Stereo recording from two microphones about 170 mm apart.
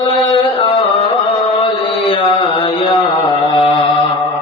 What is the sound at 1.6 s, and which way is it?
Mantra, 30° left (ahead or behind).